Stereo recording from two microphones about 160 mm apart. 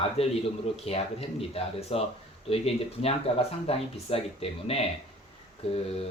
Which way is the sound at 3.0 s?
35° left (ahead or behind).